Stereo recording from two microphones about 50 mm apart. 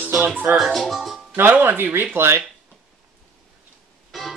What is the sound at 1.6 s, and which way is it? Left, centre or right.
Speech, right.